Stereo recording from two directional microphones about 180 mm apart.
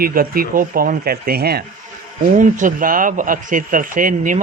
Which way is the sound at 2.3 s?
45° right (ahead or behind).